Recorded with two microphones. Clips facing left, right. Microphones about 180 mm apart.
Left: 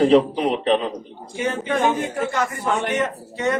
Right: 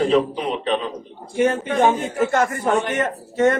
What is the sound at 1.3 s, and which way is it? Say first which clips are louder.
A man's voice: right 4 dB; 50° right (ahead or behind).